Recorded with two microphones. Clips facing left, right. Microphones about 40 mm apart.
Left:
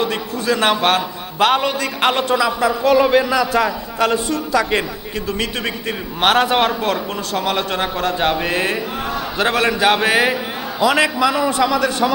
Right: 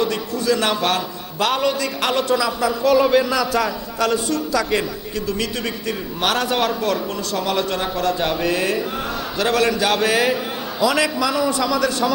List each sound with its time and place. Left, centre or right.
0.0 s a man's voice: left
6.1 s a man's voice: left